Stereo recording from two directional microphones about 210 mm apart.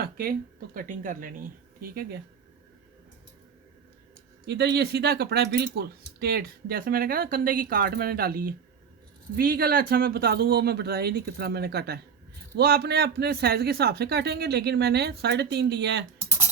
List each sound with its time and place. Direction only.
0.0 s speech: 45° right (ahead or behind)
4.4 s speech: 55° right (ahead or behind)